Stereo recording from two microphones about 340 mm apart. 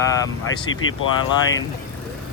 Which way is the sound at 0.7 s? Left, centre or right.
Left.